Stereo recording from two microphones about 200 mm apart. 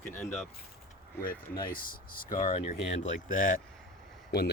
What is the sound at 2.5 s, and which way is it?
Speech, 35° left (ahead or behind).